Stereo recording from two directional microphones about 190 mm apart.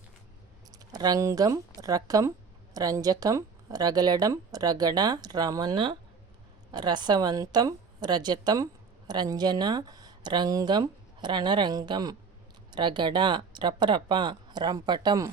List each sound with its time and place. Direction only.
0.9 s a woman's voice: 20° right (ahead or behind)